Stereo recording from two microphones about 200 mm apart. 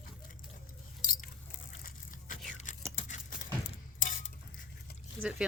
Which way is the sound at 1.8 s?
40° left (ahead or behind).